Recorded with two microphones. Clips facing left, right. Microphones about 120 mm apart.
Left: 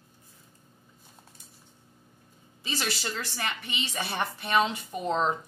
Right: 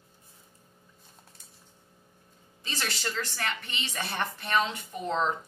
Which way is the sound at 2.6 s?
10° left (ahead or behind).